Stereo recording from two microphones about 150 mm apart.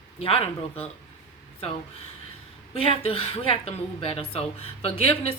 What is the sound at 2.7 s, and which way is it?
Speech, 40° left (ahead or behind).